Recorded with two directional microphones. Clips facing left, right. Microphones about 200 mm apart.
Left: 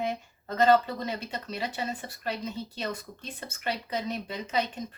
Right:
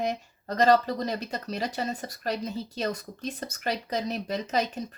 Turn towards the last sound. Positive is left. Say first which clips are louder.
# right 3 dB
turn(degrees=-40)  # may be behind; listen again after turning